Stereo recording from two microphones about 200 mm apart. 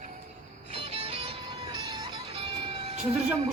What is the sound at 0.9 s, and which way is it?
Music, 30° right (ahead or behind).